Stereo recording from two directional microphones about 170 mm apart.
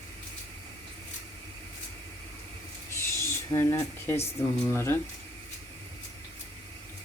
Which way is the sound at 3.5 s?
15° left (ahead or behind).